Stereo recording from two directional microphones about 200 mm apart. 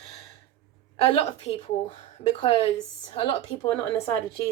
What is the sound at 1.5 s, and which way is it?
Speech, 30° left (ahead or behind).